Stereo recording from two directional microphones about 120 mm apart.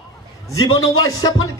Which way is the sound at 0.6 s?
30° left (ahead or behind).